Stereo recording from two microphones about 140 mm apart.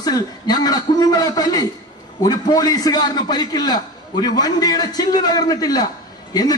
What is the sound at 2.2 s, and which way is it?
A man's voice, 25° left (ahead or behind).